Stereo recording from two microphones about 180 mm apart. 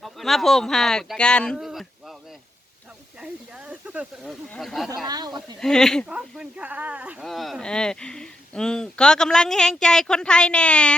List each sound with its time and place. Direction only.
0.0 s speech: centre (ahead or behind)
3.2 s speech: 5° right (ahead or behind)
5.0 s speech: 20° right (ahead or behind)
5.5 s speech: 5° left (ahead or behind)